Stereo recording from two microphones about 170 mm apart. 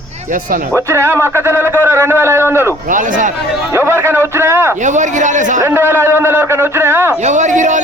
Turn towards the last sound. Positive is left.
turn(degrees=-45)  # may be behind; listen again after turning